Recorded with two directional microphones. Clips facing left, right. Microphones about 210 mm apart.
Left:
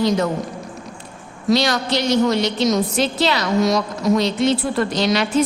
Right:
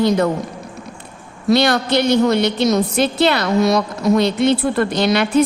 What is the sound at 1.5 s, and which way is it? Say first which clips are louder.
A woman's voice: right 3 dB; 60° right (ahead or behind).